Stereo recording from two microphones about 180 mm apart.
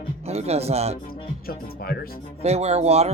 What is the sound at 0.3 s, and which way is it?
Speech, 35° right (ahead or behind).